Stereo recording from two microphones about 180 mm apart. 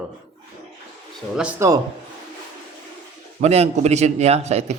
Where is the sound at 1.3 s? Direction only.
5° right (ahead or behind).